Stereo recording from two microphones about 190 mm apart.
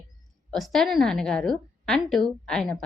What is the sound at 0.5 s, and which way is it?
A woman's voice, centre (ahead or behind).